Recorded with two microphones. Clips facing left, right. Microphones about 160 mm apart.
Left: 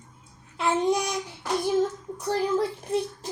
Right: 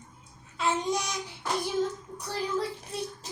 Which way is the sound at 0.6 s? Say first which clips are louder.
Left 5 dB; 60° left (ahead or behind).